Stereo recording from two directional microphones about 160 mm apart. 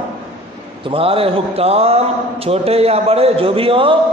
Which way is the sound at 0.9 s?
35° right (ahead or behind).